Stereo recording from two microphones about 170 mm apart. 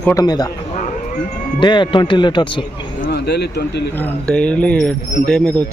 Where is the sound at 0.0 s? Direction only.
20° left (ahead or behind).